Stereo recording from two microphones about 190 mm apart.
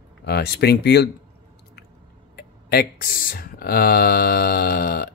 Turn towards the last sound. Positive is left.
turn(degrees=50)  # may be behind; listen again after turning